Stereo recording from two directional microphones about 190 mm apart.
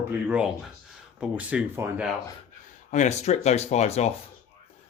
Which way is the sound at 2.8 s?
40° left (ahead or behind).